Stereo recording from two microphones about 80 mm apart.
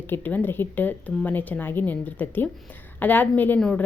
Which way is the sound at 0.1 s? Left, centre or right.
Left.